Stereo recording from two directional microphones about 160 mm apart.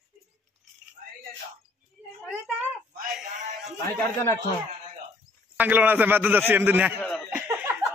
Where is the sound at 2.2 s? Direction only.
Centre (ahead or behind).